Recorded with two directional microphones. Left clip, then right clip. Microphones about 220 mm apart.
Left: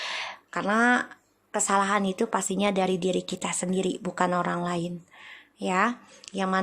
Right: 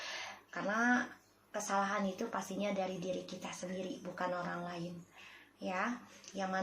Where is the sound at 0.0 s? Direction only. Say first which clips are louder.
Left 11 dB; 50° left (ahead or behind).